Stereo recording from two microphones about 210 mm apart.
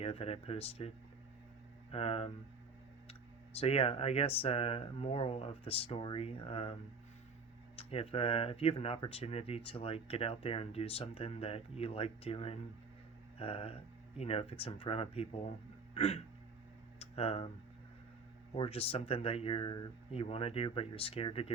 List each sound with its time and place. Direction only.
0.0 s speech: 30° left (ahead or behind)
1.9 s speech: 30° left (ahead or behind)
7.8 s speech: 25° left (ahead or behind)
18.5 s speech: 25° left (ahead or behind)